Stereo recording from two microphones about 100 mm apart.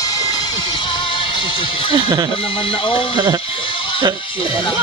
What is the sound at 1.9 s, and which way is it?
Speech, 50° right (ahead or behind).